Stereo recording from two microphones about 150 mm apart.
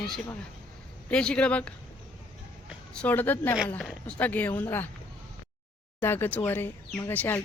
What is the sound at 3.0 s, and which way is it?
Speech, 10° left (ahead or behind).